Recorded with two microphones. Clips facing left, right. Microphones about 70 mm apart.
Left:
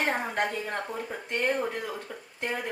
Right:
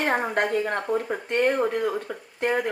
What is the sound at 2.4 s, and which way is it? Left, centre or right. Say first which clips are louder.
Speech: right 8 dB; right.